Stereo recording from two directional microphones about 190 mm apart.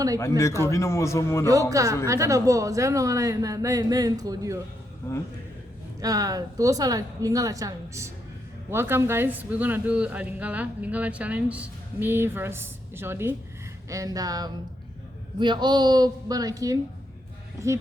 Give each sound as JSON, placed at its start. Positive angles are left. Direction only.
{"t": 0.2, "sound": "a man's voice", "side_deg": 15}
{"t": 1.7, "sound": "speech", "side_deg": -15}
{"t": 6.0, "sound": "a woman's voice", "side_deg": -20}